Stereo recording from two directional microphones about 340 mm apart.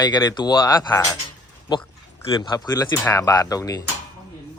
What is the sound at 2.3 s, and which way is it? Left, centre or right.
Speech, centre.